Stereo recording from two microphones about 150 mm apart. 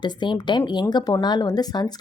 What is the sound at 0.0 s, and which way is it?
Speech, 30° left (ahead or behind).